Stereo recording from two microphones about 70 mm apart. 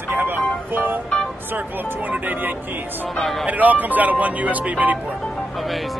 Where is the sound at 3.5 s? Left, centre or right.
Right.